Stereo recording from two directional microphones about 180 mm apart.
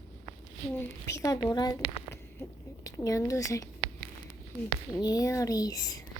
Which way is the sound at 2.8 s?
20° left (ahead or behind).